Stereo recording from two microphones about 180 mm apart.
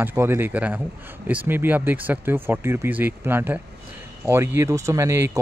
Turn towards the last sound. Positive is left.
turn(degrees=-15)  # may be behind; listen again after turning